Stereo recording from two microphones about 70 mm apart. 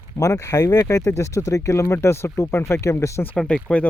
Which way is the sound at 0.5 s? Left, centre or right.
Left.